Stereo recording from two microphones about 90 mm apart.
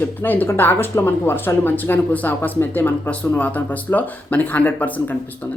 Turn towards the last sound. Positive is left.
turn(degrees=20)  # may be behind; listen again after turning